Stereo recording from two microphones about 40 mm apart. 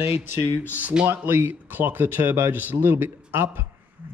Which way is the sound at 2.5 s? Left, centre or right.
Right.